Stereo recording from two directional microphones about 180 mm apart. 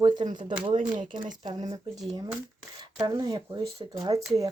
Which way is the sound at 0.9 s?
45° right (ahead or behind).